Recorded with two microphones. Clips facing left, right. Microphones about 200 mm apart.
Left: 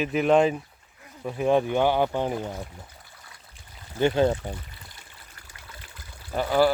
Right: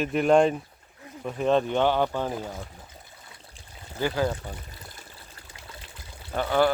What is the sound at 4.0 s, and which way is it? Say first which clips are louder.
Speech: left 5 dB; 25° left (ahead or behind).